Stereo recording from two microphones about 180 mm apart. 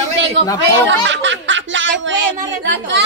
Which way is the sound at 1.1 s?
90° right.